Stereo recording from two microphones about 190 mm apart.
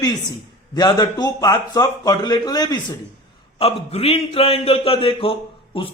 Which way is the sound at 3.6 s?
30° left (ahead or behind).